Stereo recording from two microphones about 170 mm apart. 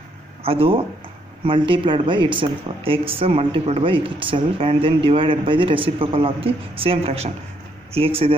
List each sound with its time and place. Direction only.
0.4 s speech: 35° right (ahead or behind)